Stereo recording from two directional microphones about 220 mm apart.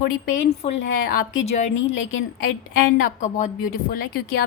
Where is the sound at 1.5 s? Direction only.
30° left (ahead or behind).